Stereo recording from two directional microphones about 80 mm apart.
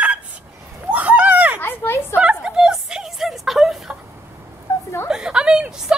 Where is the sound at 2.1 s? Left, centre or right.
Centre.